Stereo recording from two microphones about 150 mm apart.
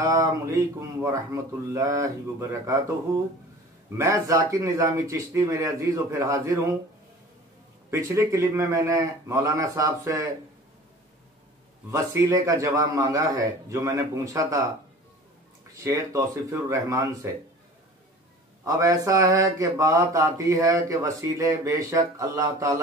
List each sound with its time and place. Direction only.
0.0 s speech: 20° right (ahead or behind)
3.9 s speech: 20° right (ahead or behind)
7.9 s speech: 20° right (ahead or behind)
11.9 s speech: 20° right (ahead or behind)
15.7 s speech: 20° right (ahead or behind)
18.6 s speech: 20° right (ahead or behind)